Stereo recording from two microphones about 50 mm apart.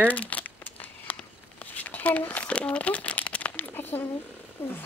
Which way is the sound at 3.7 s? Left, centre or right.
Left.